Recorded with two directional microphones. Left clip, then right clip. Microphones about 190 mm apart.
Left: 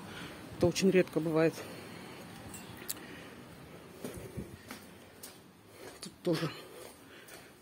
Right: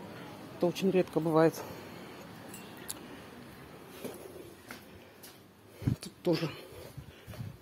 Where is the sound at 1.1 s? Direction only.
10° right (ahead or behind).